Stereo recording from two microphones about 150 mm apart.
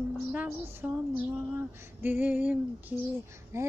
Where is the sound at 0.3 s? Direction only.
10° right (ahead or behind).